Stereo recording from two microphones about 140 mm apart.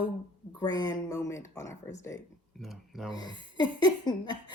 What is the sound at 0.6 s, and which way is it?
Speech, 30° left (ahead or behind).